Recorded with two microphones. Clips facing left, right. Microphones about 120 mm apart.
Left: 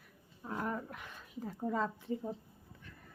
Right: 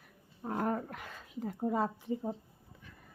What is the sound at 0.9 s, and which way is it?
Speech, 90° right.